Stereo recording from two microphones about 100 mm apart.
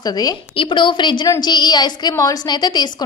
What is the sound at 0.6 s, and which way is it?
A woman's voice, 55° left (ahead or behind).